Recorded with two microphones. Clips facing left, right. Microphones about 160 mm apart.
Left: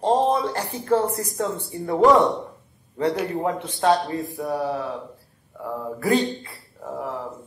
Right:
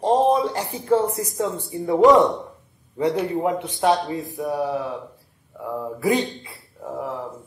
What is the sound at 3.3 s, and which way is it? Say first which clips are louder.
Speech: right 2 dB; 15° right (ahead or behind).